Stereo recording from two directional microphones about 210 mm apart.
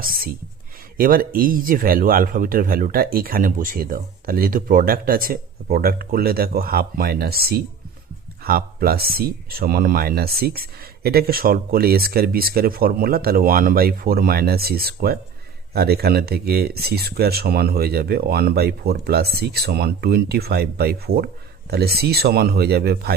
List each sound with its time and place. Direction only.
0.0 s speech: 45° right (ahead or behind)